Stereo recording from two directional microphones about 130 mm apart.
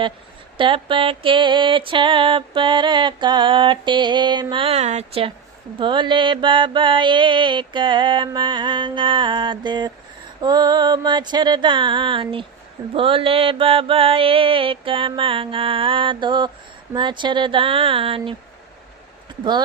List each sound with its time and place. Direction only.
0.5 s mantra: 40° right (ahead or behind)
5.8 s mantra: 40° right (ahead or behind)